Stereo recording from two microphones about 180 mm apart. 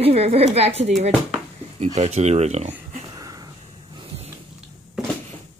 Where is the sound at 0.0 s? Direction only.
35° right (ahead or behind).